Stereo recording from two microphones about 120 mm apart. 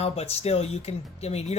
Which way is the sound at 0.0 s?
60° left (ahead or behind).